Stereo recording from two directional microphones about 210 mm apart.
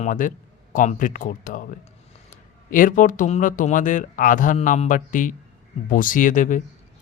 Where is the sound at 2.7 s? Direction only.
40° left (ahead or behind).